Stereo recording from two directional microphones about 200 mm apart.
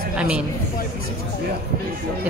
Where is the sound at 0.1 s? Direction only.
5° right (ahead or behind).